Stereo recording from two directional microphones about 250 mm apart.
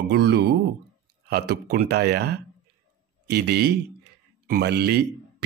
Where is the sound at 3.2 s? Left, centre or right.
Right.